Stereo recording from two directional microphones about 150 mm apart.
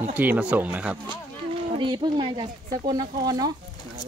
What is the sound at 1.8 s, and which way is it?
Speech, 30° right (ahead or behind).